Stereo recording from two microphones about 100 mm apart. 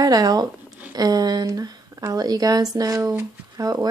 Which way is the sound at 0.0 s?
40° right (ahead or behind).